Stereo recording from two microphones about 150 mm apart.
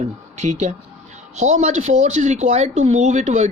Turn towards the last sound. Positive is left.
turn(degrees=-50)  # may be behind; listen again after turning